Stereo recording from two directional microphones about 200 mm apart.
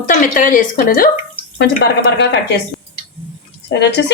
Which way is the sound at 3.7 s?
60° left (ahead or behind).